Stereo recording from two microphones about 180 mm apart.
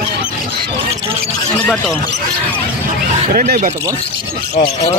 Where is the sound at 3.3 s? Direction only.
50° right (ahead or behind).